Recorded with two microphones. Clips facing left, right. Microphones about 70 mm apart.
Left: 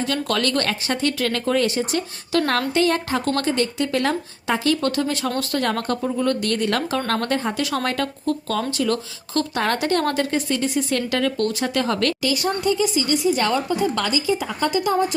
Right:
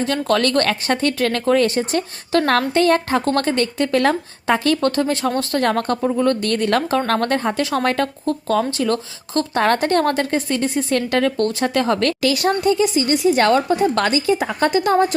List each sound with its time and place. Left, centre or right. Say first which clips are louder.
0.0 s a woman's voice: right 4 dB; right
7.6 s a woman's voice: right 4 dB; right
12.2 s a woman's voice: right 4 dB; right